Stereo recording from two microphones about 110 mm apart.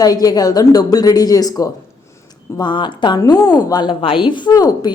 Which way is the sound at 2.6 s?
45° left (ahead or behind).